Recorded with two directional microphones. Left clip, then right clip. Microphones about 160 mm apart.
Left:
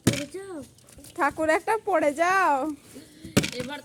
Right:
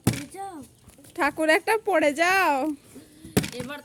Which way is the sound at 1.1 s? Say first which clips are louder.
Right 2 dB; 30° right (ahead or behind).